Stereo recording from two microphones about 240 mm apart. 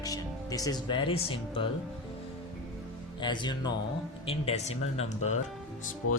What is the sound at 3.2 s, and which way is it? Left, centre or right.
Speech, centre.